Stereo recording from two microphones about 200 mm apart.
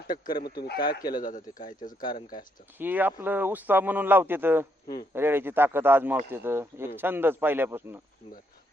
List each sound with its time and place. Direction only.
0.3 s speech: 50° left (ahead or behind)
2.0 s speech: 25° left (ahead or behind)
2.7 s speech: 10° right (ahead or behind)